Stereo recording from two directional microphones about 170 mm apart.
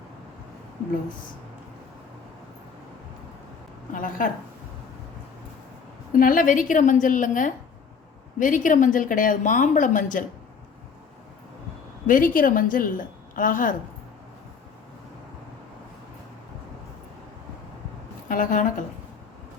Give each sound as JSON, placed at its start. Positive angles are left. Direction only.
{"t": 3.9, "sound": "a woman's voice", "side_deg": 50}
{"t": 6.1, "sound": "a woman's voice", "side_deg": 55}
{"t": 12.0, "sound": "a woman's voice", "side_deg": 55}
{"t": 18.3, "sound": "a woman's voice", "side_deg": 50}